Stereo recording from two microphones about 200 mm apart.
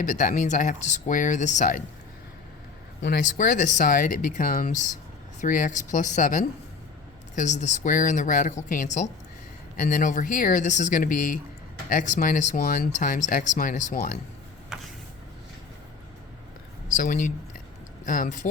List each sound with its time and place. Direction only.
0.0 s speech: 40° left (ahead or behind)
3.0 s speech: 45° left (ahead or behind)
14.7 s vehicle: centre (ahead or behind)
17.0 s speech: 40° left (ahead or behind)